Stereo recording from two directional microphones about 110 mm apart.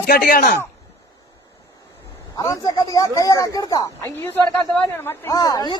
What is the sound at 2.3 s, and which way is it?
A woman's voice, 30° left (ahead or behind).